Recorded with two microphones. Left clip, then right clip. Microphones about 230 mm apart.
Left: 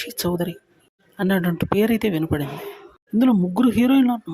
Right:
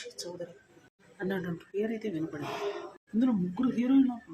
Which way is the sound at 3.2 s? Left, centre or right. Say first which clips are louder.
Left 11 dB; left.